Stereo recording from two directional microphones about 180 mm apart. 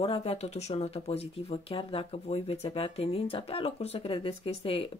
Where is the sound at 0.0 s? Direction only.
30° left (ahead or behind).